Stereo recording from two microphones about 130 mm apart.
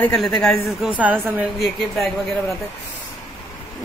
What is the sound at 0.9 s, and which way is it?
Speech, 10° right (ahead or behind).